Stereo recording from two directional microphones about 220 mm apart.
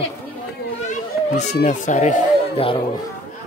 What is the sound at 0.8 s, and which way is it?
Speech, 30° left (ahead or behind).